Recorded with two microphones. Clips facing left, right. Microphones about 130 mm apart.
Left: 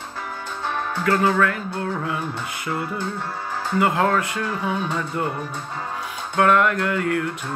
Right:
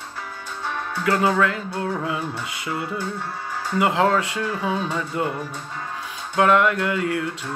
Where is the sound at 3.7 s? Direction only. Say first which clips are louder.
Right 1 dB; 15° right (ahead or behind).